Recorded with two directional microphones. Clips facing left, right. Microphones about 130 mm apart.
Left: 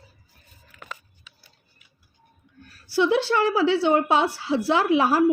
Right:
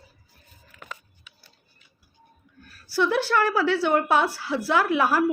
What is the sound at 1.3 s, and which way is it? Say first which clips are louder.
Tick-tock: even; 35° left (ahead or behind).